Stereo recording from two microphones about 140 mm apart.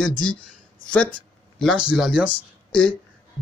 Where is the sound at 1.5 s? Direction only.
Centre (ahead or behind).